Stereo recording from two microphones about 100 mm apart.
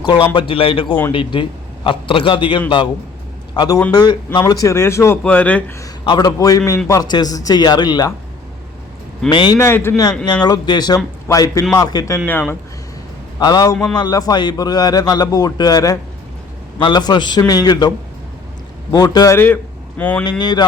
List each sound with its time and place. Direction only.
0.3 s a man's voice: 65° left (ahead or behind); by 5.2 s 25° left (ahead or behind)
5.2 s speech: 15° left (ahead or behind)
6.1 s a man's voice: 40° left (ahead or behind)
9.3 s a man's voice: 50° left (ahead or behind)
9.6 s speech: 25° left (ahead or behind)
10.4 s a man's voice: 45° left (ahead or behind)
12.2 s speech: 20° left (ahead or behind)
13.4 s a man's voice: 40° left (ahead or behind)
20.0 s speech: 15° left (ahead or behind)
20.4 s a man's voice: 45° left (ahead or behind)